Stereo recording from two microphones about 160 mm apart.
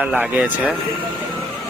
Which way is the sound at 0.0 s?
10° right (ahead or behind).